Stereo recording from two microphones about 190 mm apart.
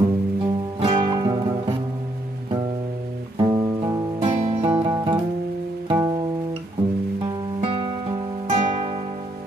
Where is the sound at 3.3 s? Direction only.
25° right (ahead or behind).